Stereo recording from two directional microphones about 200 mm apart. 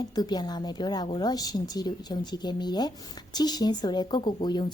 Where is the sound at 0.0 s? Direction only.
20° left (ahead or behind).